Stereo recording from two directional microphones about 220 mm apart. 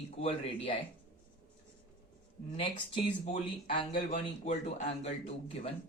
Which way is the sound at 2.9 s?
25° left (ahead or behind).